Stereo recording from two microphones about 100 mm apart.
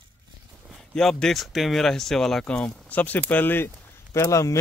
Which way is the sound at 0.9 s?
5° left (ahead or behind).